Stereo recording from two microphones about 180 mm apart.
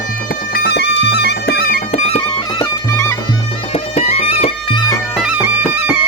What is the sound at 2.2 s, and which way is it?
Music, 20° left (ahead or behind).